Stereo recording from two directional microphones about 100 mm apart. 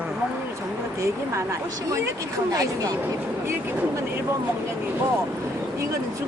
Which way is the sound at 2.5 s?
40° right (ahead or behind).